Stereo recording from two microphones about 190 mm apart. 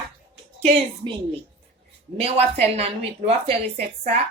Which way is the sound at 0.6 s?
30° right (ahead or behind).